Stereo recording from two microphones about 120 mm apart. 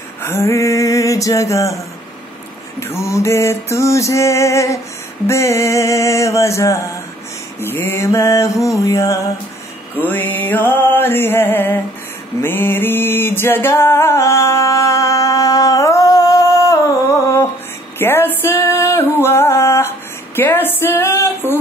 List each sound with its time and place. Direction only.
0.2 s a sound: 20° left (ahead or behind)
2.8 s music: 20° left (ahead or behind)
9.9 s music: 15° left (ahead or behind)
20.3 s speech: 15° left (ahead or behind)